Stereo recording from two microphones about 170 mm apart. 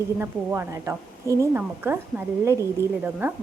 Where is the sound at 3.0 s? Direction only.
10° right (ahead or behind).